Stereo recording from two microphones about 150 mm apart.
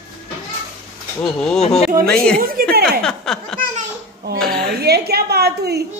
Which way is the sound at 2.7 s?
90° right.